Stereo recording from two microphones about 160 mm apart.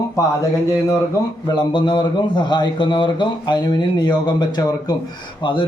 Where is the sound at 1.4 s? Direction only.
30° left (ahead or behind).